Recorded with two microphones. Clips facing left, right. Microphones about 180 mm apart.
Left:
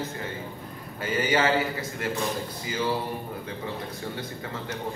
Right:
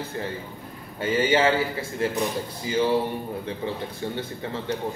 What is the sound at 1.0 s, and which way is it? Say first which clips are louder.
A man's voice: right 4 dB; 25° right (ahead or behind).